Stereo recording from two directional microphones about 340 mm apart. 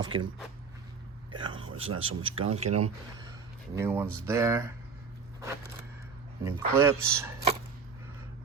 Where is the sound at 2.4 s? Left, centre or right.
Centre.